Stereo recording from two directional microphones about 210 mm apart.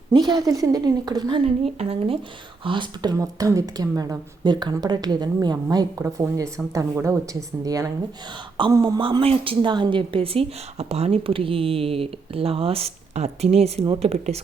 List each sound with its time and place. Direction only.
0.1 s a woman's voice: 20° right (ahead or behind)